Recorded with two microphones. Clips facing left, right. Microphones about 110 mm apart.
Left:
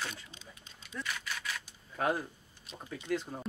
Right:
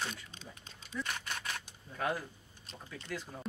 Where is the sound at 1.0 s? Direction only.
45° right (ahead or behind).